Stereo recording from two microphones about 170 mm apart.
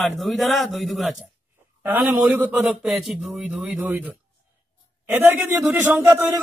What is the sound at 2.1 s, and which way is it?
Speech, 15° right (ahead or behind).